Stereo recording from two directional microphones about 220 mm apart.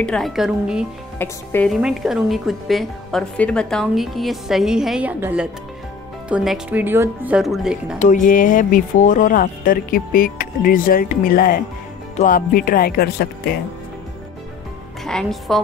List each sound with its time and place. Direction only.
0.0 s speech: centre (ahead or behind)
1.1 s speech: 10° left (ahead or behind)
1.7 s speech: 5° right (ahead or behind)
8.0 s speech: 35° left (ahead or behind)
15.0 s speech: centre (ahead or behind)